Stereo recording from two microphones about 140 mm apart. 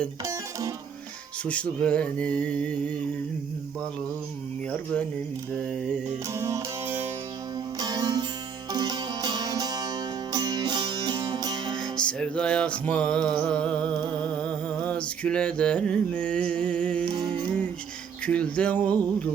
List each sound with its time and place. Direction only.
1.5 s speech: 10° left (ahead or behind)
6.3 s music: 20° right (ahead or behind)
7.8 s music: 30° right (ahead or behind)
11.8 s music: 5° left (ahead or behind)
17.1 s music: 30° right (ahead or behind)
18.3 s speech: 10° left (ahead or behind)